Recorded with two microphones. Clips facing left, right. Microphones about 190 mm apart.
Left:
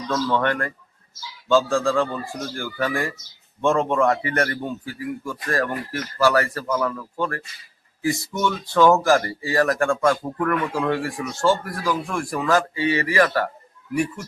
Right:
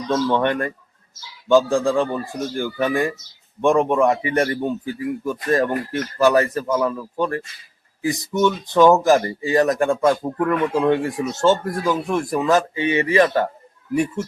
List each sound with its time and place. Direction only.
0.1 s speech: 20° right (ahead or behind)